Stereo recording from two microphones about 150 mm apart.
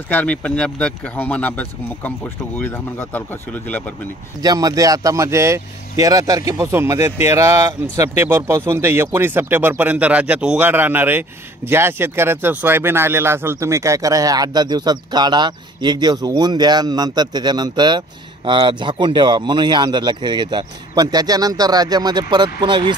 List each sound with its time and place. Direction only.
0.1 s speech: 10° left (ahead or behind)
4.4 s speech: 25° right (ahead or behind)